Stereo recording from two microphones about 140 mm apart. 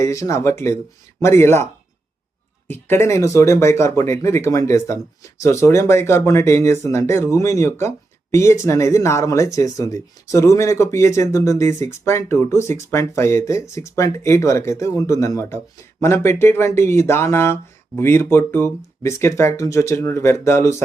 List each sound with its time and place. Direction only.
0.0 s speech: 20° left (ahead or behind)
2.6 s speech: 15° left (ahead or behind)